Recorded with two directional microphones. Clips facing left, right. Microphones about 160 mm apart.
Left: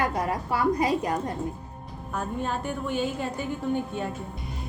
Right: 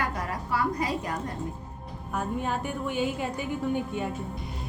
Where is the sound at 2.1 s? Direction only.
10° right (ahead or behind).